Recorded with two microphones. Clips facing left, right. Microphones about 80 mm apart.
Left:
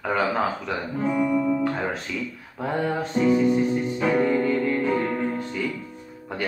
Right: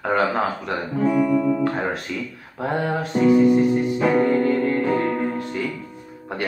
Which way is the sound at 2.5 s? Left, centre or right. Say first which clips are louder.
Right 3 dB; centre.